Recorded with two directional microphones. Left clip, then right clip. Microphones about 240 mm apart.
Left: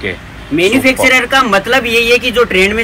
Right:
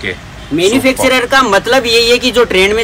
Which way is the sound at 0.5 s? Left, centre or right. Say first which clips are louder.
Left 1 dB; centre.